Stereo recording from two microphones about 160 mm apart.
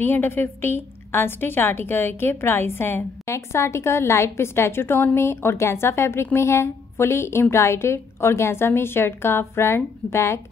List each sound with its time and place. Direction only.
0.0 s a woman's voice: 15° left (ahead or behind)